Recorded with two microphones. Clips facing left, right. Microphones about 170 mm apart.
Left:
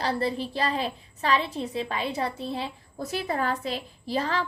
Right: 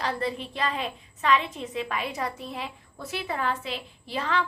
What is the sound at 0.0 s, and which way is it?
A woman's voice, 35° left (ahead or behind).